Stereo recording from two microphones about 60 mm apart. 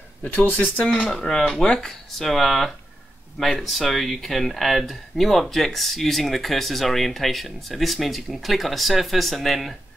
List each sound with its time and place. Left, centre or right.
0.2 s speech: left
1.1 s speech: centre